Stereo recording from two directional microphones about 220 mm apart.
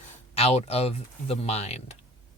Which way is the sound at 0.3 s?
30° left (ahead or behind).